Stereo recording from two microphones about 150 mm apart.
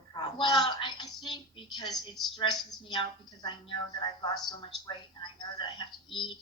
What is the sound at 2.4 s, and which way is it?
Speech, centre (ahead or behind).